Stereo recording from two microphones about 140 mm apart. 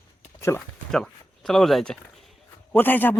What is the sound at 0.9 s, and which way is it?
Speech, 5° left (ahead or behind).